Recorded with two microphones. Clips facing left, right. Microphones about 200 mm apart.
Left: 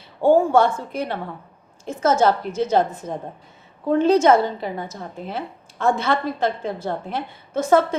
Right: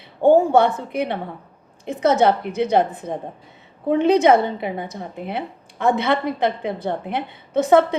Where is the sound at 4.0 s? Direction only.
60° right (ahead or behind).